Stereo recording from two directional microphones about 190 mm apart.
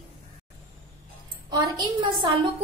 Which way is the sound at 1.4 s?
20° right (ahead or behind).